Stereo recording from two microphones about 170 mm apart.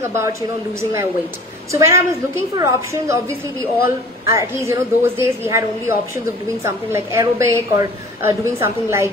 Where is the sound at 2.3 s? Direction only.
15° right (ahead or behind).